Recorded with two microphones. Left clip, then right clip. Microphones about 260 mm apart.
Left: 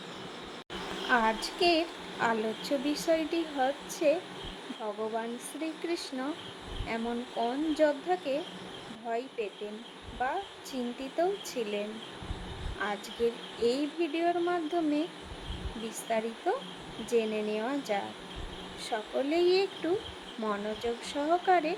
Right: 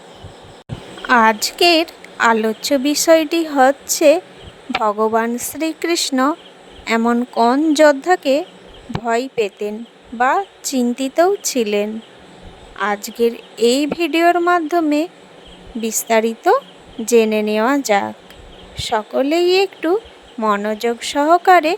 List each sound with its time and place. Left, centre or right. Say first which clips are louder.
1.0 s a woman's voice: right 15 dB; right